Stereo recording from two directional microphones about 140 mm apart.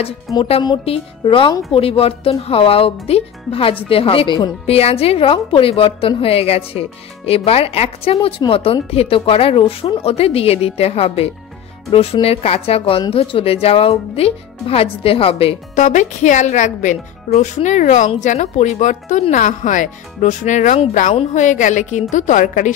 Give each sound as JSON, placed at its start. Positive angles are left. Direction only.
{"t": 0.4, "sound": "a woman's voice", "side_deg": 40}
{"t": 15.7, "sound": "speech", "side_deg": 60}